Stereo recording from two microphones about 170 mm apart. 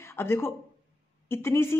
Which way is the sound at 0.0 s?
15° left (ahead or behind).